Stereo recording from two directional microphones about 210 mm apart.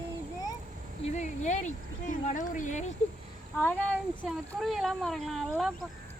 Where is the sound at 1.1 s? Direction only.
35° left (ahead or behind).